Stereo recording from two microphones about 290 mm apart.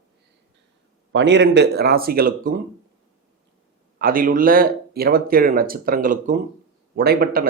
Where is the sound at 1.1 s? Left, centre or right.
Right.